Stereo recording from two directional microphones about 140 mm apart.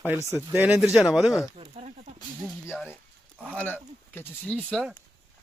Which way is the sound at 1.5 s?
50° right (ahead or behind).